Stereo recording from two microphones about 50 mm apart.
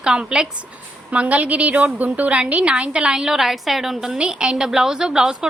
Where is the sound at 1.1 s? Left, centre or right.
Right; by 4.2 s centre.